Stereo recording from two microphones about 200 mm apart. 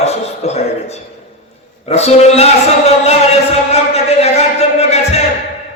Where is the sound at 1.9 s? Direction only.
30° left (ahead or behind).